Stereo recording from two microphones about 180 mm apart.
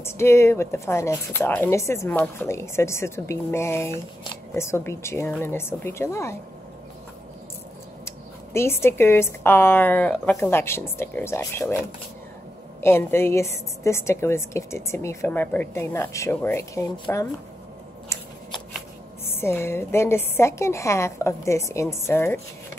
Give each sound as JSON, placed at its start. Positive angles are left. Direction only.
{"t": 0.0, "sound": "a woman's voice", "side_deg": 15}
{"t": 8.5, "sound": "a woman's voice", "side_deg": 15}
{"t": 12.8, "sound": "a woman's voice", "side_deg": 15}
{"t": 18.1, "sound": "scissors", "side_deg": 15}
{"t": 19.4, "sound": "a woman's voice", "side_deg": 15}